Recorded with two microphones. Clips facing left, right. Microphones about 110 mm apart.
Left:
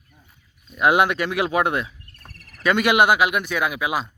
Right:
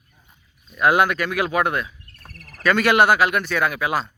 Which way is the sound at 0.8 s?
20° left (ahead or behind).